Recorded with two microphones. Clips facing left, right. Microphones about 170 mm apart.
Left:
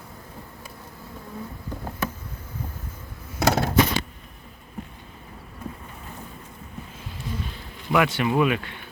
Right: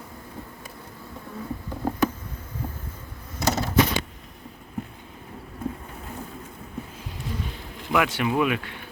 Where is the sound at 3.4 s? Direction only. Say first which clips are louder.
Left 4 dB; 65° left (ahead or behind).